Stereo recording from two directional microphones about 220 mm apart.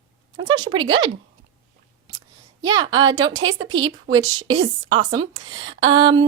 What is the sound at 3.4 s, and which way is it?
Speech, 60° right (ahead or behind).